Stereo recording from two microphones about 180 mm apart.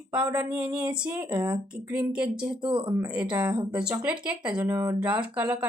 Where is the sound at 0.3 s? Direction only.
5° right (ahead or behind).